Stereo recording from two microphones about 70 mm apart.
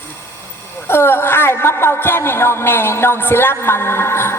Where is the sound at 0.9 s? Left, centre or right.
Left.